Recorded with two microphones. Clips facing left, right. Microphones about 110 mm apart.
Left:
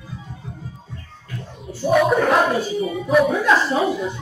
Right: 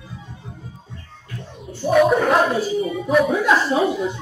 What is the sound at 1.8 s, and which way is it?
A woman's voice, centre (ahead or behind).